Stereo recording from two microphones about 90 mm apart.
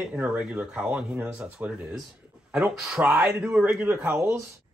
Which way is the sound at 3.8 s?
25° right (ahead or behind).